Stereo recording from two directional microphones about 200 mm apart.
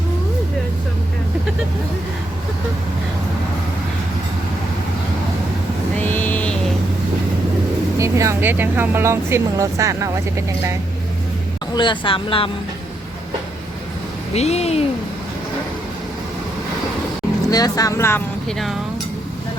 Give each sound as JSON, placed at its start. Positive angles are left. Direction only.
{"t": 6.0, "sound": "vehicle", "side_deg": 10}
{"t": 7.9, "sound": "speech", "side_deg": -15}
{"t": 11.7, "sound": "speech", "side_deg": 25}
{"t": 14.3, "sound": "speech", "side_deg": 30}
{"t": 17.5, "sound": "speech", "side_deg": 20}
{"t": 18.4, "sound": "speech", "side_deg": 0}